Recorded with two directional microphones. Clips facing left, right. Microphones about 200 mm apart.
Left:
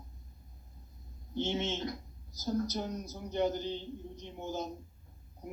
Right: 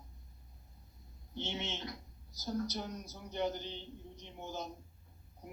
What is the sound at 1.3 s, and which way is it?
Speech, 45° left (ahead or behind).